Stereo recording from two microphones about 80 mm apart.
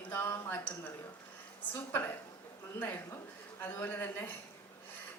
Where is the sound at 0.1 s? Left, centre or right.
Left.